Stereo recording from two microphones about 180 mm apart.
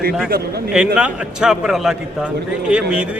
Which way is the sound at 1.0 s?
5° right (ahead or behind).